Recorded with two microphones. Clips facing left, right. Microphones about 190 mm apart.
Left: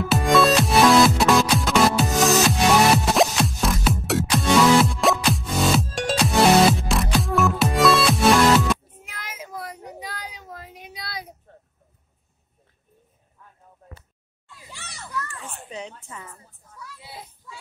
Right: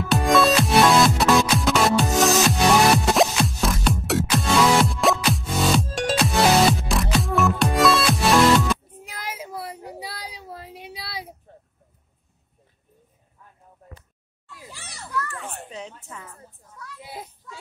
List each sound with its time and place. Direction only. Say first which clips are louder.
0.1 s music: even; centre (ahead or behind)
9.0 s child singing: right 4 dB; 35° right (ahead or behind)
15.7 s a sound: left 1 dB; centre (ahead or behind)